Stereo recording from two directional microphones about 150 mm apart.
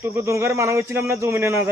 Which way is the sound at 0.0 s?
15° right (ahead or behind).